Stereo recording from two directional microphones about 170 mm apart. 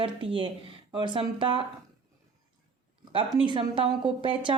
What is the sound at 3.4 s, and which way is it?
A woman's voice, 25° right (ahead or behind).